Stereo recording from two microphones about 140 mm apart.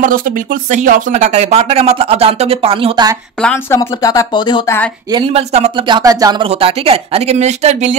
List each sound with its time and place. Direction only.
0.7 s speech: 70° right (ahead or behind); by 2.9 s 40° right (ahead or behind)
3.7 s speech: 25° left (ahead or behind)
5.1 s speech: 40° right (ahead or behind)
5.9 s speech: 30° right (ahead or behind)
6.4 s speech: 45° right (ahead or behind)